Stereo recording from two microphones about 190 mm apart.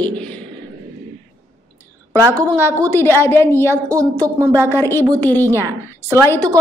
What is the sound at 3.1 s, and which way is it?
Speech, 10° left (ahead or behind).